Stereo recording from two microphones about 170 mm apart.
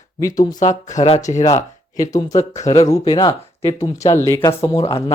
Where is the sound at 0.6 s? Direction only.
45° left (ahead or behind).